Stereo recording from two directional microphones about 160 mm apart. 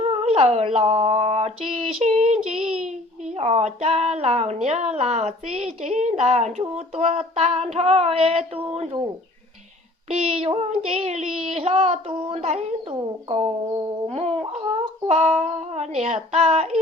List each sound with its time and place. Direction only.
0.0 s speech: 40° right (ahead or behind)
10.1 s child singing: 40° right (ahead or behind)